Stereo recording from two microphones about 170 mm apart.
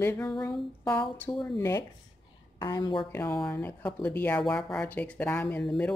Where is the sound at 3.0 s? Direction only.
15° left (ahead or behind).